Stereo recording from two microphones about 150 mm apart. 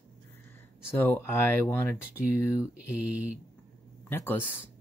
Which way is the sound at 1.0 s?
15° left (ahead or behind).